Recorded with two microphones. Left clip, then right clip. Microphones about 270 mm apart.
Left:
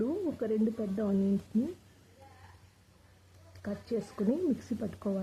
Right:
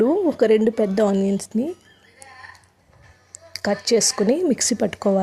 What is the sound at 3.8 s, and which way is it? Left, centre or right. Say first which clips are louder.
Speech: right 15 dB; right.